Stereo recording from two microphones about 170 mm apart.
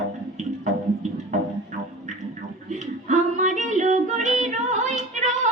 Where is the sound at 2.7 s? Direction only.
45° right (ahead or behind).